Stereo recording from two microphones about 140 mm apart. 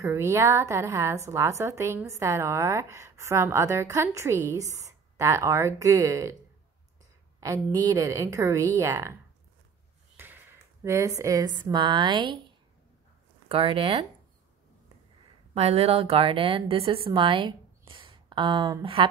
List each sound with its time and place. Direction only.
0.0 s a woman's voice: 20° right (ahead or behind)
7.3 s a woman's voice: 20° right (ahead or behind)
10.1 s speech: 15° right (ahead or behind); by 14.0 s 40° right (ahead or behind)
15.5 s a woman's voice: 45° right (ahead or behind)